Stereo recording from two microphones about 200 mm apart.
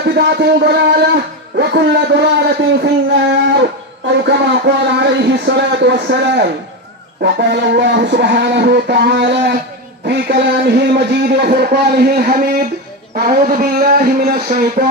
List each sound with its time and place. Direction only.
0.1 s a man's voice: 50° right (ahead or behind)